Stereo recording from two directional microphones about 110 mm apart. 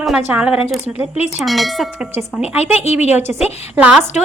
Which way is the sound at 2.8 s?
80° left.